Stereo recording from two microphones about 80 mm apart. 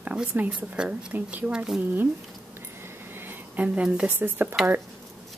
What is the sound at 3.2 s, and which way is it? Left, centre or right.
A woman's voice, centre.